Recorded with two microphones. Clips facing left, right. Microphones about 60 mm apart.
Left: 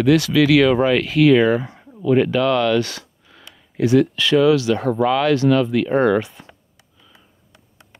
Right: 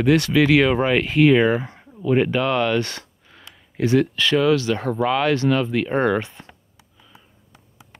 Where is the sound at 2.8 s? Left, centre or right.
Right.